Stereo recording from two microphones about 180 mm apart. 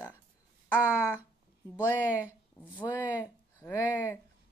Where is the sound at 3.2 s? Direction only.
15° left (ahead or behind).